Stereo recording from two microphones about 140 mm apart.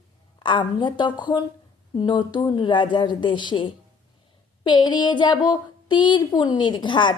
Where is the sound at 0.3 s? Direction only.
35° left (ahead or behind).